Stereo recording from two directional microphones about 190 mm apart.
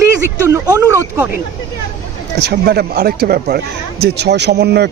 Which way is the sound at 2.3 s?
60° right (ahead or behind).